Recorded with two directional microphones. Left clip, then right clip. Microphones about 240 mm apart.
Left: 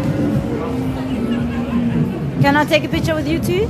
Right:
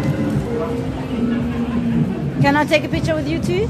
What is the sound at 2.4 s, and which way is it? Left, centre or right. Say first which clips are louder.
A woman's voice: left 1 dB; centre.